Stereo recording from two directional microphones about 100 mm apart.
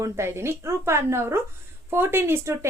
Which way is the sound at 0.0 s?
25° right (ahead or behind).